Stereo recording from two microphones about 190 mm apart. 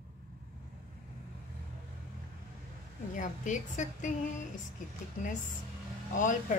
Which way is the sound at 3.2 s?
40° left (ahead or behind).